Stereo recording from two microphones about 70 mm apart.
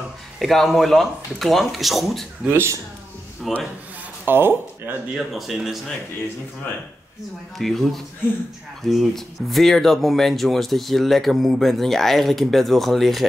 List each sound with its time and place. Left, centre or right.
0.4 s speech: centre
2.4 s speech: right
3.4 s speech: centre
4.3 s speech: right
5.1 s speech: centre
7.5 s speech: centre